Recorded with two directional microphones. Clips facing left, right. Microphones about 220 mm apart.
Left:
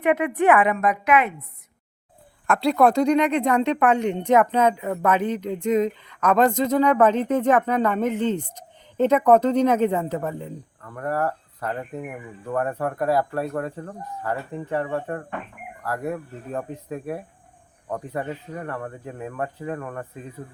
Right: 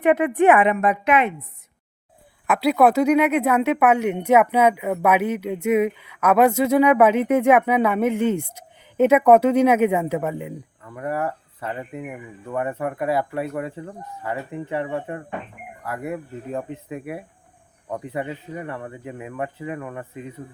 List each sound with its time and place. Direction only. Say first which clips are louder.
0.0 s a woman's voice: right 3 dB; 30° right (ahead or behind)
2.5 s speech: right 1 dB; 5° right (ahead or behind)